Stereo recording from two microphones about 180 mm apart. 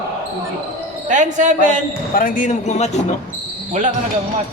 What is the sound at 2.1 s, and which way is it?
Speech, 45° left (ahead or behind).